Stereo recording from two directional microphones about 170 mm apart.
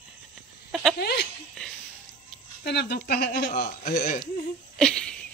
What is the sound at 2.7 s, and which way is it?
Speech, 75° left (ahead or behind).